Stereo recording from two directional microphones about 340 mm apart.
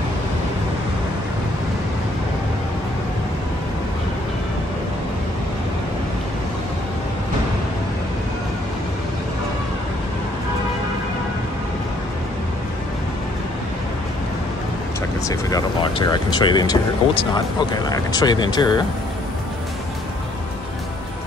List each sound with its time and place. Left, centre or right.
15.2 s speech: centre